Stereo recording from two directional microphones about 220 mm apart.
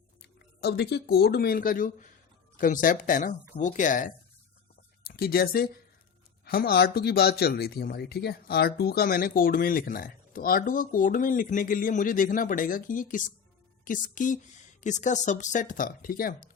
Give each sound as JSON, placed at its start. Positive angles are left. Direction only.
{"t": 0.2, "sound": "speech", "side_deg": 45}